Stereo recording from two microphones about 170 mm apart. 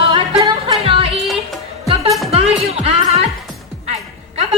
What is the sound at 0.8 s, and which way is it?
Music, 35° right (ahead or behind).